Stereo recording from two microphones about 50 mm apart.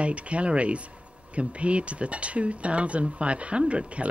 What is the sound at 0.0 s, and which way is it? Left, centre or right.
Speech, right.